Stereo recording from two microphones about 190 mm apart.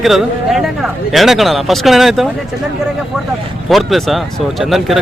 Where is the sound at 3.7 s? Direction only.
Centre (ahead or behind).